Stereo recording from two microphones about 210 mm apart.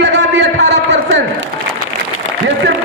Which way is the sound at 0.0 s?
55° right (ahead or behind).